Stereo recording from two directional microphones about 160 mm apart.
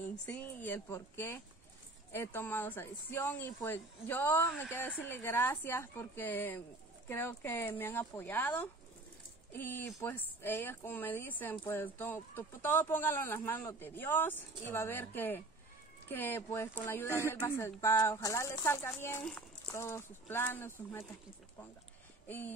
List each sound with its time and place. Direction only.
0.3 s speech: 10° left (ahead or behind)